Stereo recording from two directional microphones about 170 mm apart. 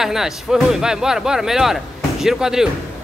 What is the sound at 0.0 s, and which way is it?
Speech, 5° right (ahead or behind).